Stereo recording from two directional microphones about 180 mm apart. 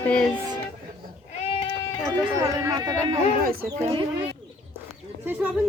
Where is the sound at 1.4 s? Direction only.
30° left (ahead or behind).